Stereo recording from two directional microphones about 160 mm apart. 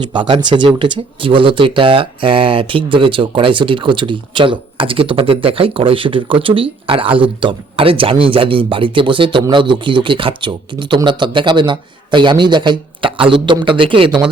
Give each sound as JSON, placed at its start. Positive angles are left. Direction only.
{"t": 0.1, "sound": "speech", "side_deg": -30}